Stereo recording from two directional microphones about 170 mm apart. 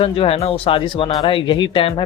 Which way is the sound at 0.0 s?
35° left (ahead or behind).